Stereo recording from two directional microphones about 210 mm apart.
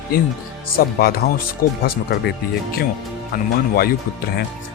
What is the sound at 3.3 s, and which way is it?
Speech, 45° left (ahead or behind).